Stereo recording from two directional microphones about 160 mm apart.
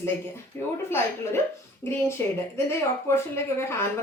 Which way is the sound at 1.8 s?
15° left (ahead or behind).